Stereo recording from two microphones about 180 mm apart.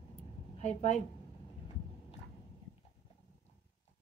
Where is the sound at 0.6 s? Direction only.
40° left (ahead or behind).